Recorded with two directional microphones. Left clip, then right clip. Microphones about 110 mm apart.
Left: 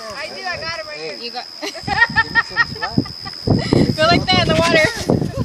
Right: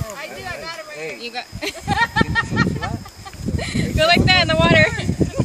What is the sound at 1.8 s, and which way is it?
Speech, 30° left (ahead or behind).